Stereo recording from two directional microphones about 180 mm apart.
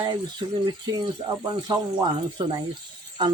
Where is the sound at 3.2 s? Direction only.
25° right (ahead or behind).